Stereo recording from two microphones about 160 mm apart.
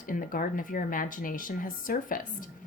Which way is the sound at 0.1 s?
60° left (ahead or behind).